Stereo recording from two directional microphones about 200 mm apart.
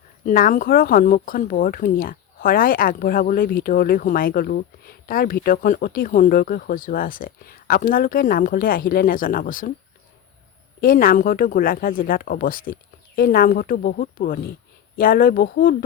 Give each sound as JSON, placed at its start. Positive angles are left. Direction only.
{"t": 0.3, "sound": "speech", "side_deg": 40}
{"t": 10.8, "sound": "speech", "side_deg": 45}